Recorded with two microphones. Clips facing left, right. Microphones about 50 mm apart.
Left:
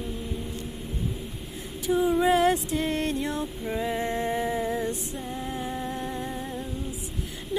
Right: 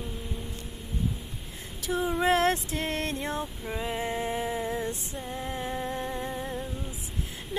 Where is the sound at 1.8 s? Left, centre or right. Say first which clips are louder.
Left 4 dB; right.